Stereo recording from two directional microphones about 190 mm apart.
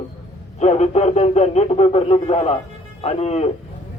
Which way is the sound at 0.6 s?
35° left (ahead or behind).